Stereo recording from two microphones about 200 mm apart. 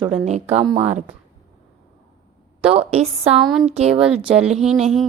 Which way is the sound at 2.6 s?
30° right (ahead or behind).